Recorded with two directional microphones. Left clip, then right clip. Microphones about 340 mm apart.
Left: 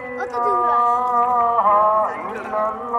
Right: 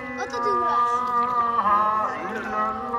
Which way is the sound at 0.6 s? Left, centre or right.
Centre.